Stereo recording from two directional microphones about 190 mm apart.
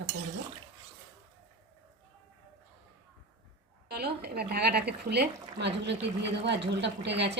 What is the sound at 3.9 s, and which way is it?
A woman's voice, 55° right (ahead or behind).